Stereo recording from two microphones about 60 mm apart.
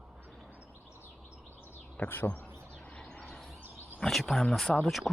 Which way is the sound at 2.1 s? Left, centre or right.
Left.